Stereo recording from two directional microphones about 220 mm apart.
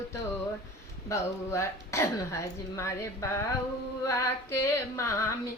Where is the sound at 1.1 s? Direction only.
10° left (ahead or behind).